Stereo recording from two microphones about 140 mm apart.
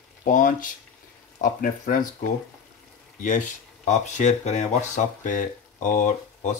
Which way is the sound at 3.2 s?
65° left (ahead or behind).